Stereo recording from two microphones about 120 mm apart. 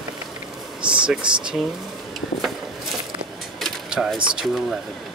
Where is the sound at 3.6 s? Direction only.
Centre (ahead or behind).